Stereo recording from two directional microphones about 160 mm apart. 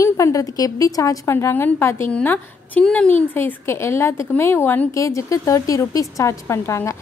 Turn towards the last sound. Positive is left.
turn(degrees=15)  # may be behind; listen again after turning